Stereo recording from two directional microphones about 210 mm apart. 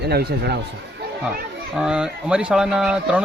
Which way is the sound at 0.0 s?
50° right (ahead or behind).